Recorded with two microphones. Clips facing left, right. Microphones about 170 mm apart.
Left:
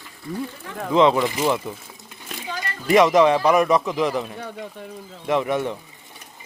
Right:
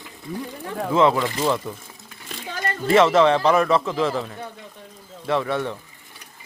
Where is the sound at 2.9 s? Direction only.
15° left (ahead or behind).